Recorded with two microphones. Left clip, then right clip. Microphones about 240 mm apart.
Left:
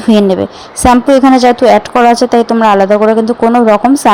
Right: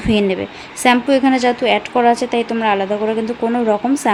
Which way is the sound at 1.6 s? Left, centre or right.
Left.